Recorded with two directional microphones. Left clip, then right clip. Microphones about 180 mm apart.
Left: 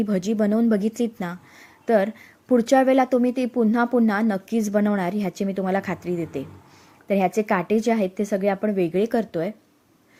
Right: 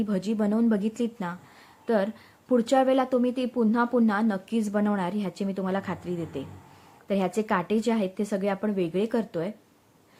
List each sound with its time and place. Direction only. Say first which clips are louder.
0.0 s a woman's voice: left 5 dB; 20° left (ahead or behind)